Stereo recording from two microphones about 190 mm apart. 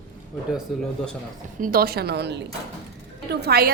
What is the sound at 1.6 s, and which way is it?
A woman's voice, 50° right (ahead or behind).